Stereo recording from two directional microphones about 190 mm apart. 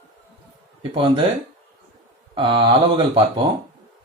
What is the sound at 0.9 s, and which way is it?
Speech, 25° right (ahead or behind).